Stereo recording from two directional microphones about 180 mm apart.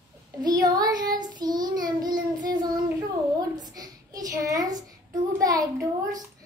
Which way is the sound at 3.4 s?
20° right (ahead or behind).